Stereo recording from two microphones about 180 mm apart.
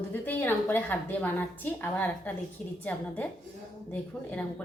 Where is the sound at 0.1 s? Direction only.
10° left (ahead or behind).